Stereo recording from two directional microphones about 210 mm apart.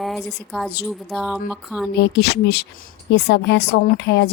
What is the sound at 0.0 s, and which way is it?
A woman's voice, centre (ahead or behind).